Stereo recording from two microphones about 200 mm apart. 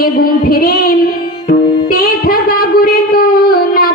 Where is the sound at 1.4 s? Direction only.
45° left (ahead or behind).